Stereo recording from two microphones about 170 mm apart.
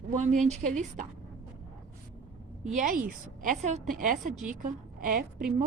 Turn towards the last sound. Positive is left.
turn(degrees=-55)  # may be behind; listen again after turning